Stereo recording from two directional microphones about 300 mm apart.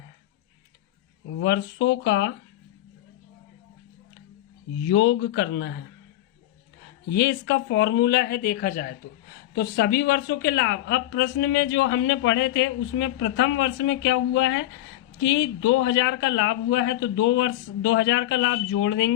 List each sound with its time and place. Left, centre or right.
1.4 s a woman's voice: left
4.9 s a woman's voice: left
7.1 s a woman's voice: left